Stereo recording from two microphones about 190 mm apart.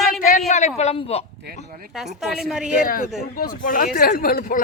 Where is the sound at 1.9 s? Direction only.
Centre (ahead or behind).